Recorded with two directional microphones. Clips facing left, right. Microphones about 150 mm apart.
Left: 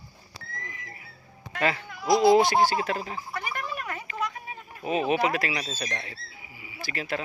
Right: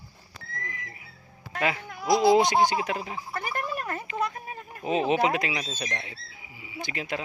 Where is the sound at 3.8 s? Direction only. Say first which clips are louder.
Right 2 dB; 35° right (ahead or behind).